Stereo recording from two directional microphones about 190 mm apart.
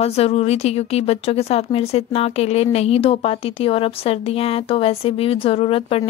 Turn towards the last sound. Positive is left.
turn(degrees=30)  # may be behind; listen again after turning